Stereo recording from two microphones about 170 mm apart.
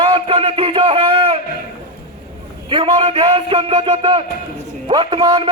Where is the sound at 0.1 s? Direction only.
30° right (ahead or behind).